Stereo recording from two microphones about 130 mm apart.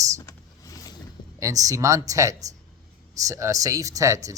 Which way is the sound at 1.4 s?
25° right (ahead or behind).